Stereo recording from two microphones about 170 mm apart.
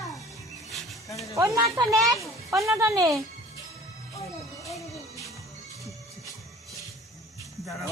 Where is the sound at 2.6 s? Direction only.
15° right (ahead or behind).